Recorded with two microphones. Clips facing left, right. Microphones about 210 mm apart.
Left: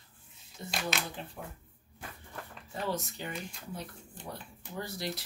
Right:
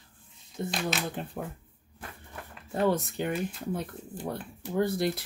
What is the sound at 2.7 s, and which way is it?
Speech, 55° right (ahead or behind).